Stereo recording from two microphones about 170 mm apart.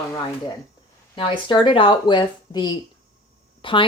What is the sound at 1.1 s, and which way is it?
Speech, 30° left (ahead or behind).